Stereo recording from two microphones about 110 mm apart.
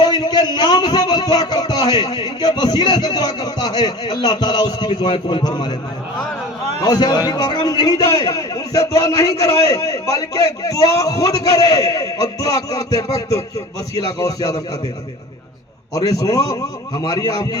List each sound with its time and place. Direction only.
0.0 s a man's voice: 40° left (ahead or behind)
6.8 s a man's voice: 35° left (ahead or behind)
16.0 s a man's voice: 35° left (ahead or behind)